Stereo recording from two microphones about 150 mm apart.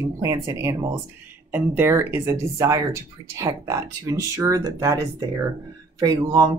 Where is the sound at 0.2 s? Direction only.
20° right (ahead or behind).